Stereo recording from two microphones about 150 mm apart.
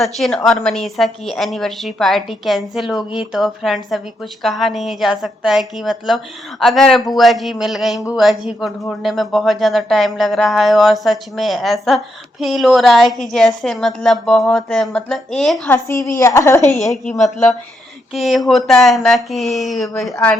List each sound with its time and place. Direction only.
0.0 s speech: centre (ahead or behind)
15.7 s a woman's voice: 20° left (ahead or behind)
18.1 s speech: centre (ahead or behind)